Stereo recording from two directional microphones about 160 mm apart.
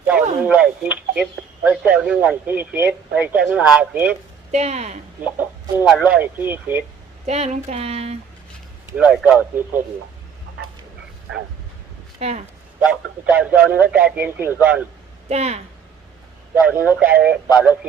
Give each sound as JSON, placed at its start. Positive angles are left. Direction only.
{"t": 0.0, "sound": "a sound", "side_deg": -10}
{"t": 0.4, "sound": "speech", "side_deg": -10}
{"t": 4.5, "sound": "speech", "side_deg": -45}
{"t": 5.2, "sound": "speech", "side_deg": -10}
{"t": 7.3, "sound": "speech", "side_deg": -45}
{"t": 9.0, "sound": "speech", "side_deg": -10}
{"t": 12.2, "sound": "speech", "side_deg": -40}
{"t": 12.8, "sound": "speech", "side_deg": -10}
{"t": 15.3, "sound": "speech", "side_deg": -40}
{"t": 16.6, "sound": "speech", "side_deg": -10}